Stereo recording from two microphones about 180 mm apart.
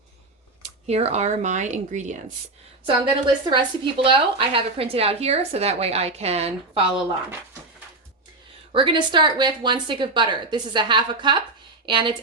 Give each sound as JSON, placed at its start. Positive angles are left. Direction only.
{"t": 0.9, "sound": "a woman's voice", "side_deg": -35}
{"t": 2.8, "sound": "a woman's voice", "side_deg": -30}
{"t": 8.7, "sound": "a woman's voice", "side_deg": -30}